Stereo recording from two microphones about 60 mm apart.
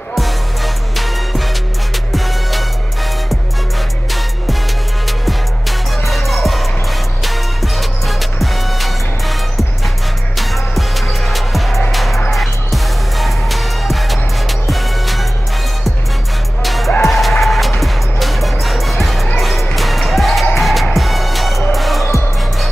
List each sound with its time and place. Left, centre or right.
0.9 s music: centre
5.0 s music: centre
16.6 s music: centre